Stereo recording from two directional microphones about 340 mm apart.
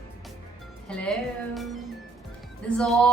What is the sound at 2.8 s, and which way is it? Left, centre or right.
Music, centre.